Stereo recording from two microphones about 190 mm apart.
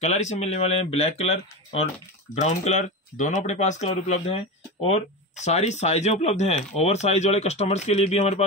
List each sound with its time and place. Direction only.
0.0 s speech: 35° left (ahead or behind)